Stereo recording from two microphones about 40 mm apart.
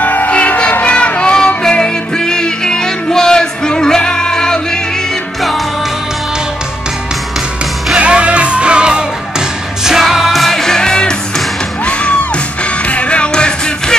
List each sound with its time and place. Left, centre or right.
0.0 s music: left
0.8 s a sound: left
1.6 s music: centre
8.0 s music: right
9.8 s music: centre; by 13.9 s left